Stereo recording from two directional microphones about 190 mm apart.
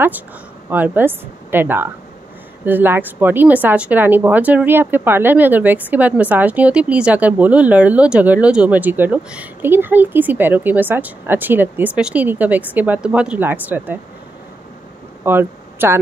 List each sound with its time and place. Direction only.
0.7 s a woman's voice: 10° right (ahead or behind)
15.2 s speech: 10° right (ahead or behind)